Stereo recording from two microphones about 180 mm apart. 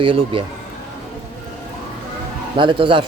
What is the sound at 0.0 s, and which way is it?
Speech, 30° right (ahead or behind).